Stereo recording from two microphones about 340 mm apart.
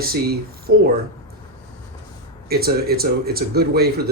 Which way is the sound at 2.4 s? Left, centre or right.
Right.